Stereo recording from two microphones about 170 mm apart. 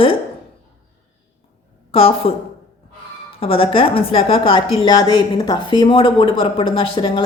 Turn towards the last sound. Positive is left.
turn(degrees=30)  # may be behind; listen again after turning